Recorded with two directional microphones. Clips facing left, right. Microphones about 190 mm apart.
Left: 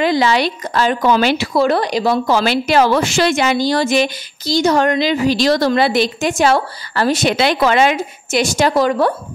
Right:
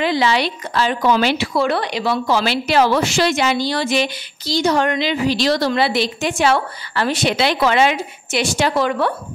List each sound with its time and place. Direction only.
0.0 s speech: 45° left (ahead or behind)